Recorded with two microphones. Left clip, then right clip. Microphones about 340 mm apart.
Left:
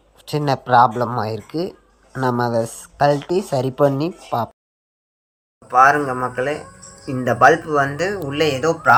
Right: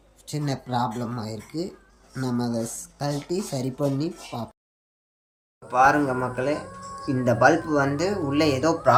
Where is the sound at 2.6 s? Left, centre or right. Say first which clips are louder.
Left 13 dB; left.